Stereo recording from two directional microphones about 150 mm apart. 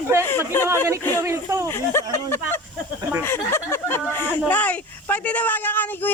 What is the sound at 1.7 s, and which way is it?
Speech, 15° left (ahead or behind).